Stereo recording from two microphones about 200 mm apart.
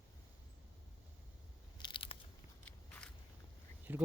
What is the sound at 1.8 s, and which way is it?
Crunch, 25° left (ahead or behind).